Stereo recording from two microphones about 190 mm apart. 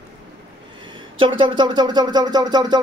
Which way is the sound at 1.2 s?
25° right (ahead or behind).